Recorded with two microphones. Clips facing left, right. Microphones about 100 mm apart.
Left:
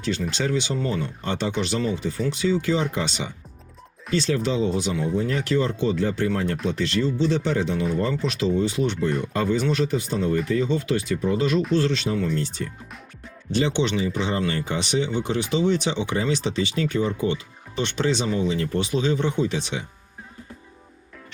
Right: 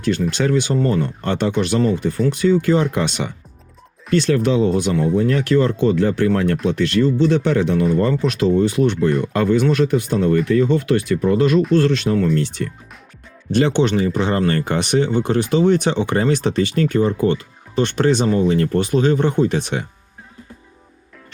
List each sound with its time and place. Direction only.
0.0 s speech: 55° right (ahead or behind)